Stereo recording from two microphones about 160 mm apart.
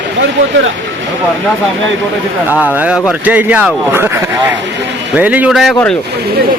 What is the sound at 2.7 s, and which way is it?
Speech, 10° right (ahead or behind).